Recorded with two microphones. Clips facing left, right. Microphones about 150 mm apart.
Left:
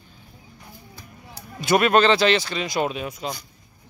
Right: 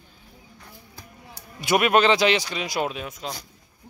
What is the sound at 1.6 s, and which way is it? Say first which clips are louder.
A man's voice: left 2 dB; 10° right (ahead or behind).